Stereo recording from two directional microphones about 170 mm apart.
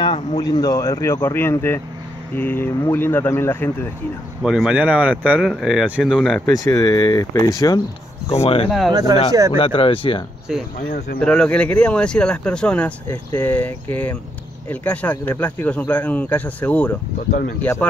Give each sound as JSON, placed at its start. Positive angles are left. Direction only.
{"t": 0.0, "sound": "speech", "side_deg": 30}
{"t": 4.4, "sound": "speech", "side_deg": -5}
{"t": 6.5, "sound": "speech", "side_deg": 20}
{"t": 8.6, "sound": "speech", "side_deg": 0}
{"t": 8.9, "sound": "speech", "side_deg": -25}
{"t": 9.6, "sound": "speech", "side_deg": 30}
{"t": 10.5, "sound": "speech", "side_deg": 0}
{"t": 10.9, "sound": "speech", "side_deg": 50}
{"t": 11.1, "sound": "speech", "side_deg": 5}
{"t": 17.3, "sound": "speech", "side_deg": 60}
{"t": 17.6, "sound": "speech", "side_deg": 10}